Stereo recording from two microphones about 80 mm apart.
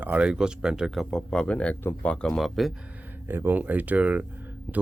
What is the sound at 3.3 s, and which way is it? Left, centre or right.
Speech, right.